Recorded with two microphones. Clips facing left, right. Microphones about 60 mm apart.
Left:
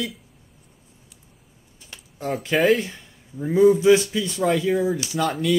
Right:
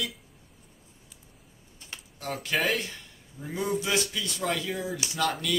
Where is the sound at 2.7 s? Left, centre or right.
Centre.